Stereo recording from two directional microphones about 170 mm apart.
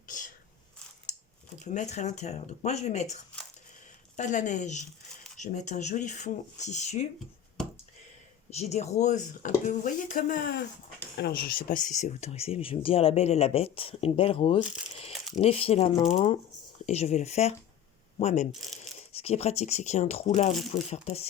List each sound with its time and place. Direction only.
1.6 s speech: 45° left (ahead or behind)
4.2 s speech: 45° left (ahead or behind)
8.4 s speech: 40° left (ahead or behind)